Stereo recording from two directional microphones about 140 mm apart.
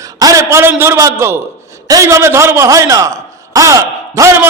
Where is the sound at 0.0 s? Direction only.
25° right (ahead or behind).